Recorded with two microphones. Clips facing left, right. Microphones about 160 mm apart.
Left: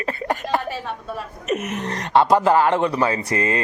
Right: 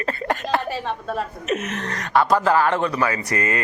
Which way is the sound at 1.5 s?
10° left (ahead or behind).